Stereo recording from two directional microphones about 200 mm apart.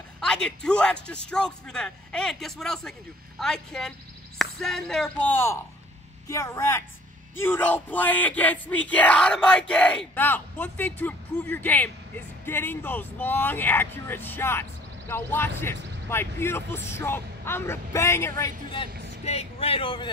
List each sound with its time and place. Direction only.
0.2 s speech: 5° left (ahead or behind); by 18.9 s 20° left (ahead or behind)
19.2 s speech: 30° left (ahead or behind)